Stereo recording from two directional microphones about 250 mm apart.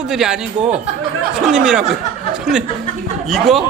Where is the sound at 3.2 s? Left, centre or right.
Centre.